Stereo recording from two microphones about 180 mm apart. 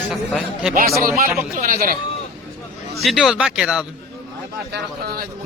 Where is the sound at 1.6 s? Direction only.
50° right (ahead or behind).